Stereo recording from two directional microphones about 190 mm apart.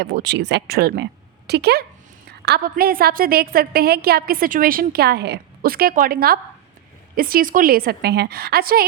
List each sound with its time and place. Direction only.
0.0 s a woman's voice: 65° right (ahead or behind)